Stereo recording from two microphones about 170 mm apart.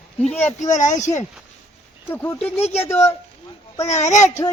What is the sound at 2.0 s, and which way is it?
Speech, 10° left (ahead or behind).